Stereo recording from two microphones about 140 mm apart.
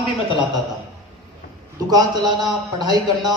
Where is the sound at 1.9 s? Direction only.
25° right (ahead or behind).